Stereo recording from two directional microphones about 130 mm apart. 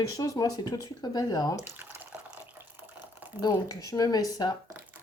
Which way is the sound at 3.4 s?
30° left (ahead or behind).